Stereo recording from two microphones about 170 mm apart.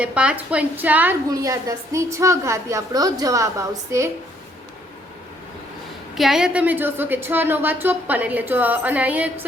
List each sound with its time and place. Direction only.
0.0 s a woman's voice: 5° right (ahead or behind)
6.1 s a woman's voice: centre (ahead or behind)